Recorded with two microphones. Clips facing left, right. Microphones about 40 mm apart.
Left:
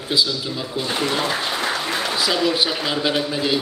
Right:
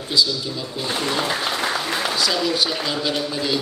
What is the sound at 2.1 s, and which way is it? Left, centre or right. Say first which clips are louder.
A man's voice: left 3 dB; centre.